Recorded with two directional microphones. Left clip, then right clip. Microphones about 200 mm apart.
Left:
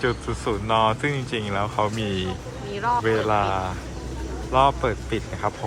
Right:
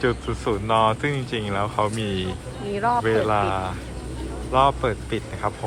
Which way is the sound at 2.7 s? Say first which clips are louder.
Right 1 dB; 30° right (ahead or behind).